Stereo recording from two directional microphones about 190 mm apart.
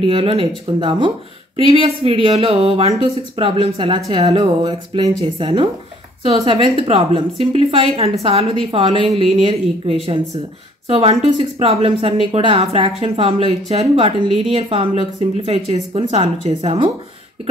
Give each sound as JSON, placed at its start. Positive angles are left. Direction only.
{"t": 0.0, "sound": "a woman's voice", "side_deg": -30}